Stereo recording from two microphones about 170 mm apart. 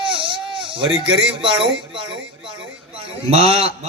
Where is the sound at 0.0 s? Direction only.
30° right (ahead or behind).